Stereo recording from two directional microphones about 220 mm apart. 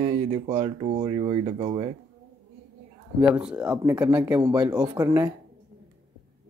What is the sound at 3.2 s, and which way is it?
Speech, 5° right (ahead or behind).